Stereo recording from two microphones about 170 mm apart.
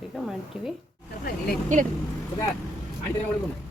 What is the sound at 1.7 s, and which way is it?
Speech, 45° right (ahead or behind).